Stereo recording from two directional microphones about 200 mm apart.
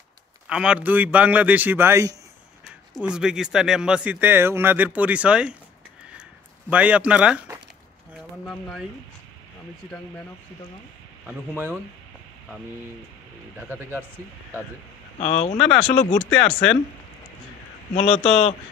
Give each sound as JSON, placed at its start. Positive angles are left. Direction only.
{"t": 0.5, "sound": "a man's voice", "side_deg": -5}
{"t": 6.7, "sound": "a man's voice", "side_deg": -5}
{"t": 11.2, "sound": "a man's voice", "side_deg": -5}
{"t": 13.6, "sound": "a man's voice", "side_deg": -10}
{"t": 15.1, "sound": "speech", "side_deg": 30}
{"t": 17.9, "sound": "a man's voice", "side_deg": 30}